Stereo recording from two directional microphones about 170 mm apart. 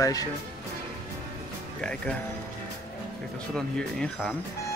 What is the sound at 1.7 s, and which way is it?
Speech, 5° left (ahead or behind).